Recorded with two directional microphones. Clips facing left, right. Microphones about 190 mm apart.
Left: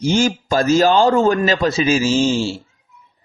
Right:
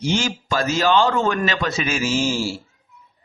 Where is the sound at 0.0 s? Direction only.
45° left (ahead or behind); by 2.6 s 25° left (ahead or behind).